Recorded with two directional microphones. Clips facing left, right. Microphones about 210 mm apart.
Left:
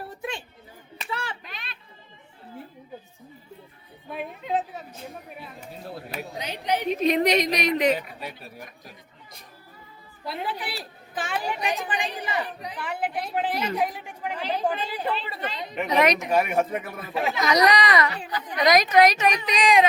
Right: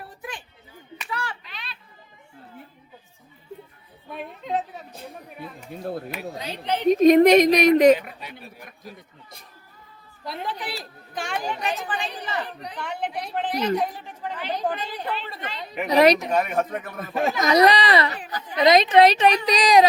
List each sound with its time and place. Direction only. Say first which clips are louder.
0.2 s music: left 4 dB; 25° left (ahead or behind)
0.9 s a sound: right 1 dB; 25° left (ahead or behind)
1.5 s children playing: even; 45° left (ahead or behind)
4.1 s a sound: even; centre (ahead or behind)
6.4 s a woman's voice: left 1 dB; 15° left (ahead or behind)
6.9 s a woman's voice: right 10 dB; 45° right (ahead or behind)
10.2 s a woman's voice: even; 5° left (ahead or behind)
15.9 s speech: right 5 dB; 35° right (ahead or behind)
16.3 s a woman's voice: left 1 dB; 10° left (ahead or behind)
17.0 s a woman's voice: right 4 dB; 45° right (ahead or behind)
17.5 s speech: right 3 dB; 30° right (ahead or behind)